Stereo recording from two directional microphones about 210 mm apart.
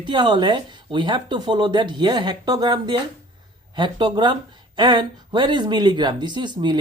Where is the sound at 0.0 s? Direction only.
20° right (ahead or behind).